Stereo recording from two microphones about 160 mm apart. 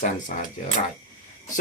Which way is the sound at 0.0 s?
55° left (ahead or behind).